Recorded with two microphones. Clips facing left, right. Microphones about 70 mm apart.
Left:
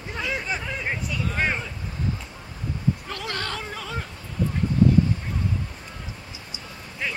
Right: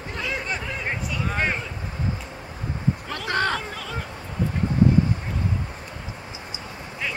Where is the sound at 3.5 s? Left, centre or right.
Centre.